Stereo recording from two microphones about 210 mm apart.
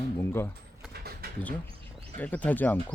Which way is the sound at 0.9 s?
50° right (ahead or behind).